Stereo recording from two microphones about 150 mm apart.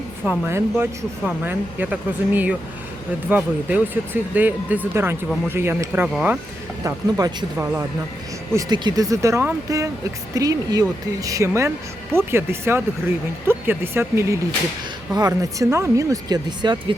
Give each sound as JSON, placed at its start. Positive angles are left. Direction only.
{"t": 0.3, "sound": "speech", "side_deg": -15}